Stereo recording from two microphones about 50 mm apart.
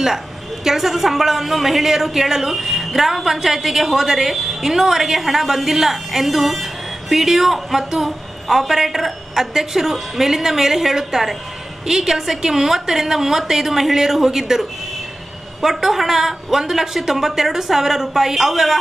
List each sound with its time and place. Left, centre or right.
0.7 s a woman's voice: centre